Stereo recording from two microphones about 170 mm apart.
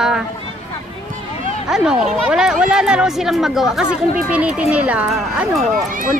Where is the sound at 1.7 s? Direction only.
5° right (ahead or behind).